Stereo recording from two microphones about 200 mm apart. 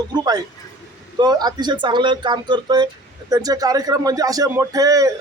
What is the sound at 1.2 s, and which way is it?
Speech, 20° right (ahead or behind).